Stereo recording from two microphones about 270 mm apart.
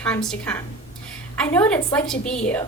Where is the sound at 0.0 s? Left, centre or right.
Centre.